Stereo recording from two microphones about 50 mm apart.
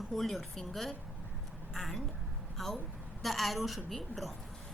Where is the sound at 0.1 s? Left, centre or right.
Centre.